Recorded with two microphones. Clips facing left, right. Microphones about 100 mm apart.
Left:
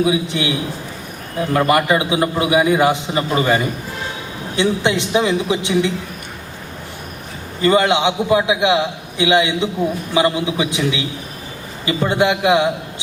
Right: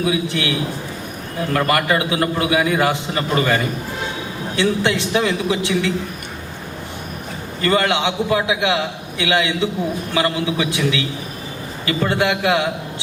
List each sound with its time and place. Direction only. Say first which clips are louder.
0.0 s a man's voice: left 2 dB; 20° left (ahead or behind)
7.6 s a man's voice: left 3 dB; 20° left (ahead or behind)